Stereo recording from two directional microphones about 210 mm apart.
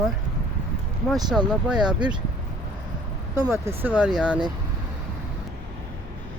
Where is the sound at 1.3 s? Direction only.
5° right (ahead or behind).